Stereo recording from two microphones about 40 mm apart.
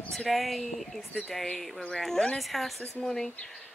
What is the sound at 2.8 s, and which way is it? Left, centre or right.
Speech, centre.